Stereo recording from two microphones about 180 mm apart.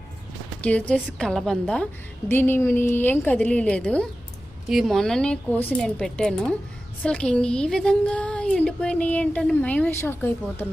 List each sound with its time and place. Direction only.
0.6 s speech: 5° left (ahead or behind)